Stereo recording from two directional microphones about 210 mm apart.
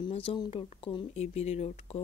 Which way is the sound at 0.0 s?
25° left (ahead or behind).